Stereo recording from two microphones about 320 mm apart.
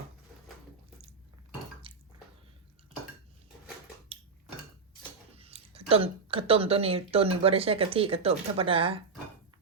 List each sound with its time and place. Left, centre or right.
1.9 s drip: centre
5.4 s a sound: centre
5.9 s speech: centre